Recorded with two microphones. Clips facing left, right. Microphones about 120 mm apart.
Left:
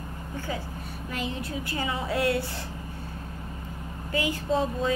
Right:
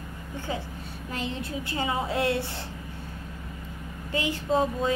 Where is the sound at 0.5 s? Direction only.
25° right (ahead or behind).